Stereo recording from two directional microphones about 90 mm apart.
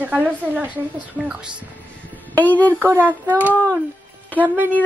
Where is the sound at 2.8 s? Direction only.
25° right (ahead or behind).